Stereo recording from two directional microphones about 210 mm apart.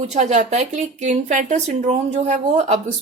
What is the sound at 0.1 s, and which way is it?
Speech, 35° right (ahead or behind).